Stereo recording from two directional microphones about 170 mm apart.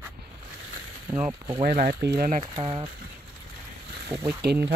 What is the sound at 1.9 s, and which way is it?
Speech, 65° right (ahead or behind).